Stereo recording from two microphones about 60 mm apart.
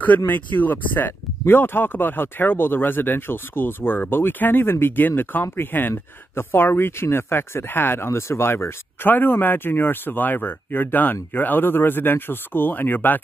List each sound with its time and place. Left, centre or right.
0.3 s speech: left